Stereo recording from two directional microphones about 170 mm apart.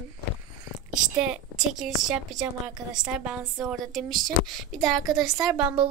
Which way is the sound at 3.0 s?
5° right (ahead or behind).